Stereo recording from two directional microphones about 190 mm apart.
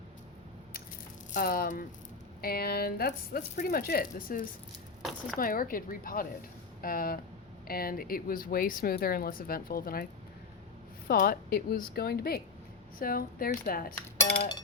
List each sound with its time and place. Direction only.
1.3 s speech: 50° left (ahead or behind)
11.1 s speech: 50° left (ahead or behind)